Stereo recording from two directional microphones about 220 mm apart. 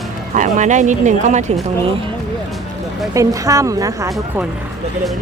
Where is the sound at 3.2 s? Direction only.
15° right (ahead or behind).